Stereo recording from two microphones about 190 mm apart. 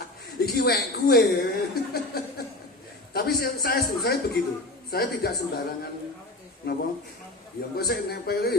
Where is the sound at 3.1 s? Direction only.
55° left (ahead or behind).